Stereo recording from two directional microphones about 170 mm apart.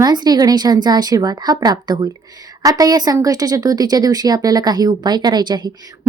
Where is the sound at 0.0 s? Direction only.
25° right (ahead or behind).